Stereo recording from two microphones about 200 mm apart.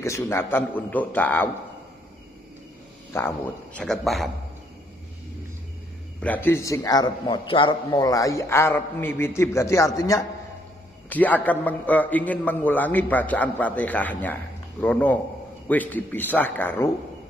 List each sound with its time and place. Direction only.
0.0 s a man's voice: 15° left (ahead or behind)
3.1 s speech: 10° left (ahead or behind)
6.2 s a man's voice: 10° left (ahead or behind)